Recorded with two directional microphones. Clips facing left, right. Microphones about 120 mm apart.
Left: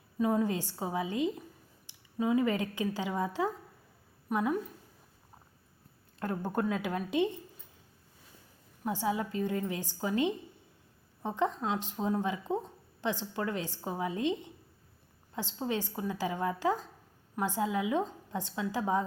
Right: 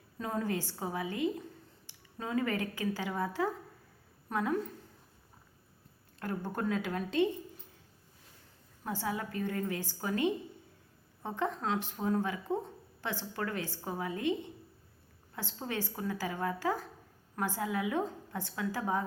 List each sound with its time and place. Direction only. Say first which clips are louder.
0.2 s a woman's voice: left 5 dB; 15° left (ahead or behind)
6.1 s speech: left 4 dB; 20° left (ahead or behind)
8.8 s speech: left 4 dB; 15° left (ahead or behind)